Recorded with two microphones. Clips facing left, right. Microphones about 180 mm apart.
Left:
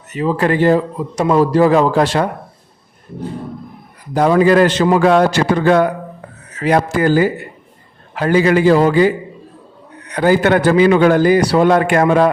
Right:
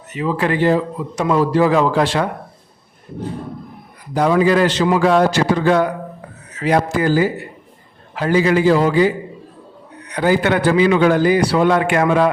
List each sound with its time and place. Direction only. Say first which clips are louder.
0.1 s a man's voice: left 3 dB; 40° left (ahead or behind)
4.1 s a man's voice: left 3 dB; 50° left (ahead or behind)